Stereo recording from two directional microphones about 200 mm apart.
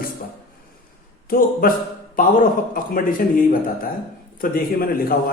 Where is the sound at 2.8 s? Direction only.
45° left (ahead or behind).